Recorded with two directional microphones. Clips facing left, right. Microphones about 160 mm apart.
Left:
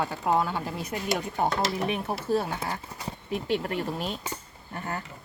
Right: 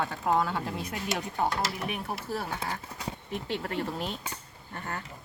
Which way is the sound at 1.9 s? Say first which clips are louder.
Left 7 dB; 20° left (ahead or behind).